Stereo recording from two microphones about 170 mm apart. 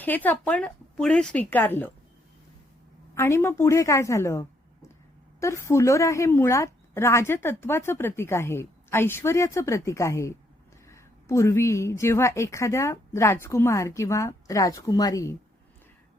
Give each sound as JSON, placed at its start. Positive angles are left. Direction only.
{"t": 0.0, "sound": "speech", "side_deg": 10}
{"t": 3.2, "sound": "speech", "side_deg": 15}